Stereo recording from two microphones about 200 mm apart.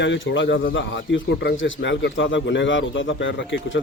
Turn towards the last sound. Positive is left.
turn(degrees=70)  # may be behind; listen again after turning